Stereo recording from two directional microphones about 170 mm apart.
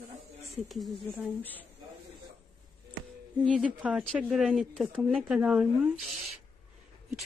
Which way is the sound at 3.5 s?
5° right (ahead or behind).